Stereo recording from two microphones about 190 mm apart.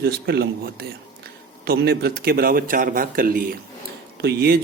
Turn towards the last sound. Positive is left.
turn(degrees=-55)  # may be behind; listen again after turning